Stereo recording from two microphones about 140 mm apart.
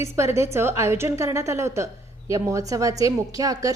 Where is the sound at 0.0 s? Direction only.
20° right (ahead or behind).